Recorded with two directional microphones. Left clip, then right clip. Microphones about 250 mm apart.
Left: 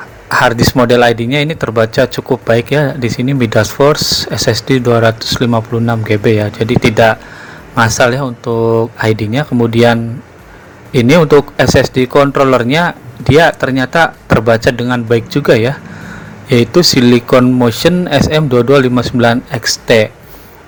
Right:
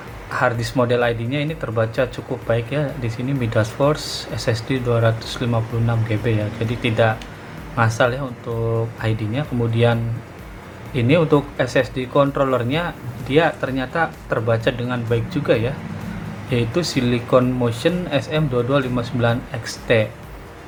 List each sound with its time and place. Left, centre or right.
0.3 s a man's voice: left